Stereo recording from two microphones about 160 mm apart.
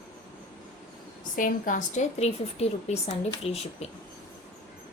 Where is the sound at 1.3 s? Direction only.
55° left (ahead or behind); by 3.9 s 40° left (ahead or behind).